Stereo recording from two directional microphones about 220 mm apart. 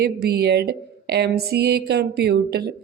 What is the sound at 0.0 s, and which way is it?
Speech, 45° right (ahead or behind).